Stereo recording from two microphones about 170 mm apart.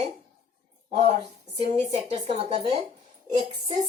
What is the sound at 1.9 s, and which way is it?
Speech, 40° right (ahead or behind).